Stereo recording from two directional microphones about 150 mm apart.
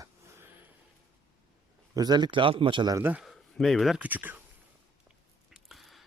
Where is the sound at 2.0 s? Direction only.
25° right (ahead or behind).